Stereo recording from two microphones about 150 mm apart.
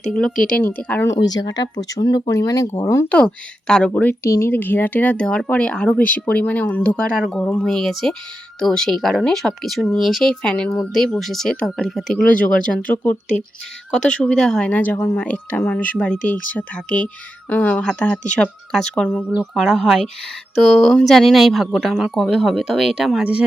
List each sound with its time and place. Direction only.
0.1 s speech: 5° left (ahead or behind)
1.2 s speech: 25° left (ahead or behind)
3.1 s speech: 10° left (ahead or behind)
14.2 s speech: 5° left (ahead or behind)